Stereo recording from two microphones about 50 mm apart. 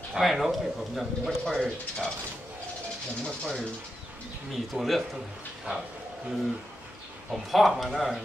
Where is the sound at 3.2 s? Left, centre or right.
Centre.